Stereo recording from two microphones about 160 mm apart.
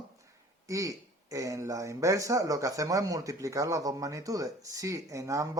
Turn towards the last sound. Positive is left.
turn(degrees=-20)  # may be behind; listen again after turning